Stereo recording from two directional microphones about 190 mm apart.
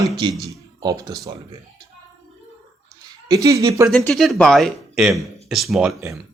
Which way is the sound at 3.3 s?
15° right (ahead or behind).